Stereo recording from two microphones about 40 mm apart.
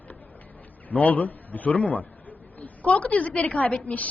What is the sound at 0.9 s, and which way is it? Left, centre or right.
A man's voice, left.